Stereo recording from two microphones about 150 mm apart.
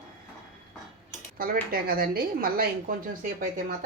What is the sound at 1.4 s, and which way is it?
Speech, 80° right.